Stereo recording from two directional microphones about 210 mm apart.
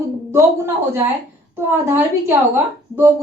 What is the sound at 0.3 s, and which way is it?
A woman's voice, 10° right (ahead or behind).